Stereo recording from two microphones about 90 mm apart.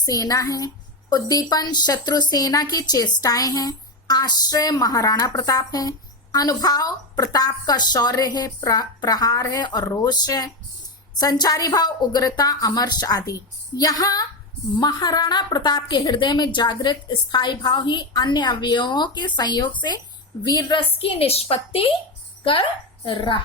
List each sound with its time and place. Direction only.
0.0 s a woman's voice: 45° left (ahead or behind)
21.0 s a woman's voice: 90° left
23.0 s speech: 75° left (ahead or behind)